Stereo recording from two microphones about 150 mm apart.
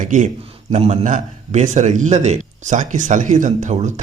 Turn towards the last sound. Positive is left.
turn(degrees=-50)  # may be behind; listen again after turning